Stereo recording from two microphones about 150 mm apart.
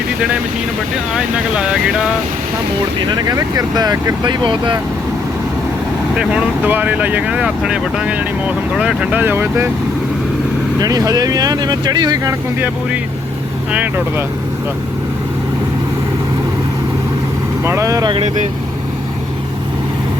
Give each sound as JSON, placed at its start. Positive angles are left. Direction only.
{"t": 1.1, "sound": "speech", "side_deg": -5}
{"t": 3.2, "sound": "speech", "side_deg": -25}
{"t": 6.1, "sound": "speech", "side_deg": -10}
{"t": 10.8, "sound": "speech", "side_deg": -25}
{"t": 12.5, "sound": "speech", "side_deg": -10}
{"t": 17.7, "sound": "speech", "side_deg": -20}